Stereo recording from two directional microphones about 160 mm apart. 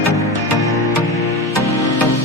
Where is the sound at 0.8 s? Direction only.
20° left (ahead or behind).